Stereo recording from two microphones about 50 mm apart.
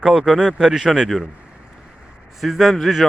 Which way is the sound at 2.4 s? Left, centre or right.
Centre.